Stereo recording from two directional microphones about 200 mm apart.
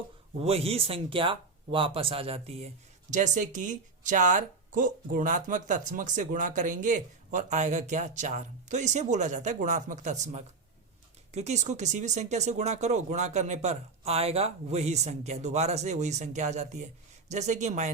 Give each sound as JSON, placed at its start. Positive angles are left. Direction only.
{"t": 0.3, "sound": "speech", "side_deg": -30}